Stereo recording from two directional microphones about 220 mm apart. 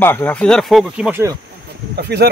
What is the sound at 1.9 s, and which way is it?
Speech, 50° right (ahead or behind).